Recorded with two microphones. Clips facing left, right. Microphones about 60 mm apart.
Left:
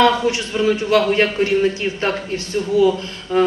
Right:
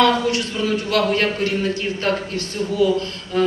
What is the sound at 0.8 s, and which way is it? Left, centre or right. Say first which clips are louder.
Speech: left 2 dB; left.